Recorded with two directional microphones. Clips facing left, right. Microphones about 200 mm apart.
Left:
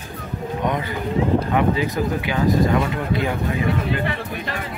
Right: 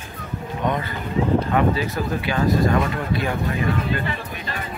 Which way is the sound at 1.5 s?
15° left (ahead or behind).